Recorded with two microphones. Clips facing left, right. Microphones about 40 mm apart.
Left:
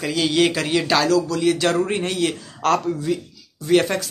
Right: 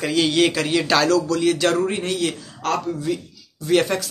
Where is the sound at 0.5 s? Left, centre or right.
Centre.